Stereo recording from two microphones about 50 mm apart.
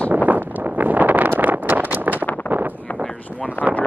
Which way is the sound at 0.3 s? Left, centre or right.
Right.